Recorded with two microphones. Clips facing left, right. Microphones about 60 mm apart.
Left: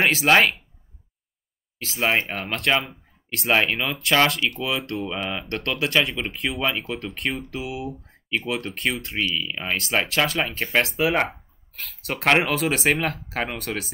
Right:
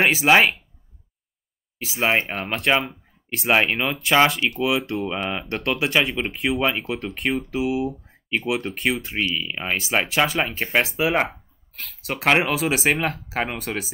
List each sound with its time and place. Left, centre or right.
0.0 s speech: centre
1.8 s speech: centre
5.5 s speech: centre